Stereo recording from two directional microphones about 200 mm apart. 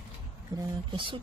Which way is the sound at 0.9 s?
25° right (ahead or behind).